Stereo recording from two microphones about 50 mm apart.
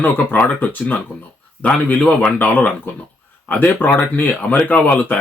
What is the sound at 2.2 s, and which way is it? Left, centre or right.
Speech, left.